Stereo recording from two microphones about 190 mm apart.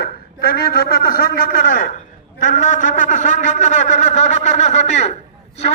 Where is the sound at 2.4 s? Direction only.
40° left (ahead or behind).